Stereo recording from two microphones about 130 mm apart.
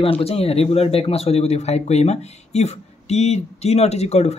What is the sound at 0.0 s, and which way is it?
A man's voice, 50° left (ahead or behind).